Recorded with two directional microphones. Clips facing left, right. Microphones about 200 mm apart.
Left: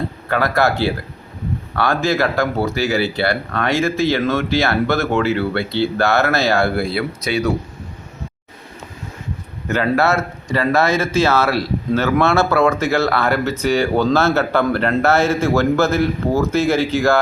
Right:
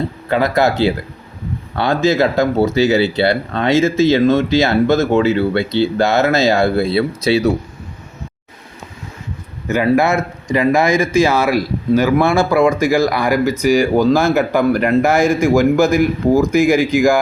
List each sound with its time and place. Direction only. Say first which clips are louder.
0.3 s speech: right 3 dB; 20° right (ahead or behind)
9.6 s speech: right 3 dB; 10° right (ahead or behind)